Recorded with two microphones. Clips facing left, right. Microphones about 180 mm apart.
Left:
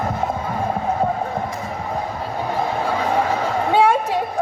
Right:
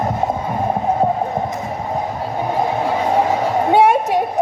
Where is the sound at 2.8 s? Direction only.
20° right (ahead or behind).